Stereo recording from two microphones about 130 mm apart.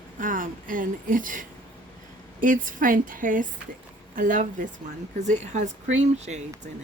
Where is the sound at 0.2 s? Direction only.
90° right.